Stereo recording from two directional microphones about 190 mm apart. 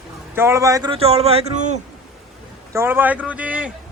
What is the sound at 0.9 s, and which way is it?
Speech, 30° right (ahead or behind).